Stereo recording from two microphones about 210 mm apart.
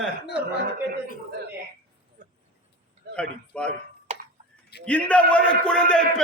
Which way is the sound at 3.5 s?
5° left (ahead or behind).